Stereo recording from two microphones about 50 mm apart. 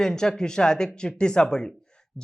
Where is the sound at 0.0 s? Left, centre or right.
Centre.